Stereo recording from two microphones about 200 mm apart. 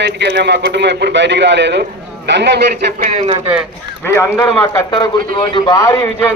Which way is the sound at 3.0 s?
40° right (ahead or behind).